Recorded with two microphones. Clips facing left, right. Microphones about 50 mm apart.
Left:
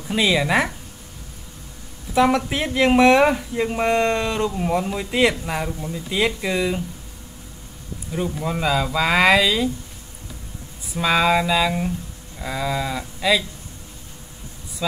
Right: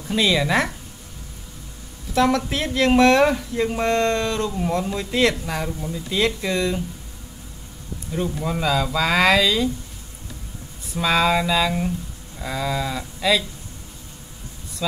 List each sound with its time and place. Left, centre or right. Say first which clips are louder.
0.1 s speech: left 1 dB; centre
2.1 s speech: left 1 dB; centre
8.1 s speech: even; centre
11.0 s speech: left 1 dB; centre
14.8 s speech: left 1 dB; centre